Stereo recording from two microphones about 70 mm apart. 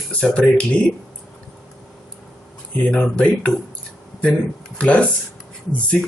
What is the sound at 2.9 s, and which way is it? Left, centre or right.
Speech, centre.